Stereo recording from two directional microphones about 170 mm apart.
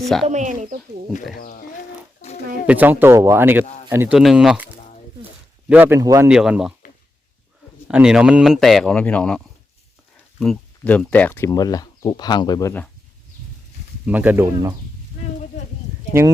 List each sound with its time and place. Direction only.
0.3 s speech: 45° right (ahead or behind)
1.4 s speech: 60° left (ahead or behind)
2.2 s a sound: 40° left (ahead or behind)
2.6 s speech: 10° right (ahead or behind)
4.2 s speech: centre (ahead or behind); by 6.2 s 20° right (ahead or behind)
6.2 s speech: 5° right (ahead or behind)
7.9 s speech: 5° right (ahead or behind)
10.4 s speech: 5° left (ahead or behind)
14.0 s speech: 10° right (ahead or behind)
15.1 s a sound: 50° left (ahead or behind)